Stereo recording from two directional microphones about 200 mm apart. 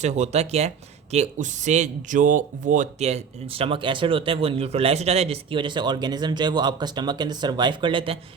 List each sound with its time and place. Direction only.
0.0 s speech: 35° right (ahead or behind)